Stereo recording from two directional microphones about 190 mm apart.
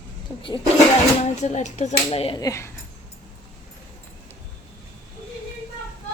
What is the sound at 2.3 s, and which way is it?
Speech, 15° left (ahead or behind).